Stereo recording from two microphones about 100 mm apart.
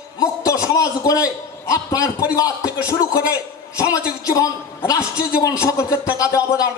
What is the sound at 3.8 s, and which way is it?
A man's voice, 35° left (ahead or behind).